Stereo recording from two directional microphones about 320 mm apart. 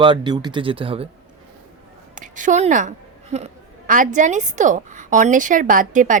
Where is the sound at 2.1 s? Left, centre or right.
Right.